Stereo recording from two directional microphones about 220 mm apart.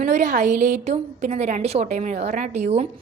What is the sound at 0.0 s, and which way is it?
A woman's voice, 35° right (ahead or behind).